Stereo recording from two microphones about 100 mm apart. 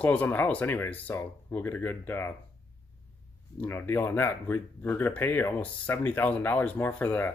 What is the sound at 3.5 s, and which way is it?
Speech, 20° left (ahead or behind).